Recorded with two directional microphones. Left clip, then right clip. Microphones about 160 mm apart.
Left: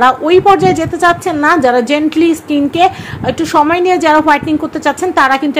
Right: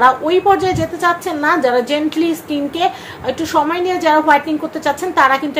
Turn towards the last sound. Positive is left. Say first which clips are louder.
# left 3 dB
turn(degrees=40)  # may be behind; listen again after turning